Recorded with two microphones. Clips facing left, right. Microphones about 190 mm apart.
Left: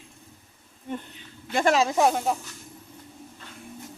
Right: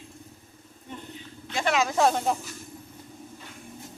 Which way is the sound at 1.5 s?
40° left (ahead or behind).